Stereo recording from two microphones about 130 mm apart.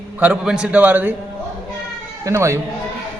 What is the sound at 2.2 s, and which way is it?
Speech, 20° right (ahead or behind).